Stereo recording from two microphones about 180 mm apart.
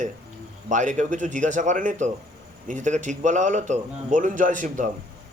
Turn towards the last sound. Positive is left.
turn(degrees=-45)  # may be behind; listen again after turning